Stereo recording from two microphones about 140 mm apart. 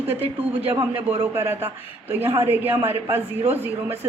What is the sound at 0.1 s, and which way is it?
A man's voice, 15° right (ahead or behind).